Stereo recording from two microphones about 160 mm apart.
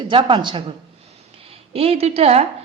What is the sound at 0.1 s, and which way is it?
A woman's voice, 30° right (ahead or behind).